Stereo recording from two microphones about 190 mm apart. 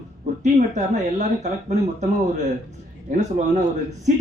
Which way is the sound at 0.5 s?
40° right (ahead or behind).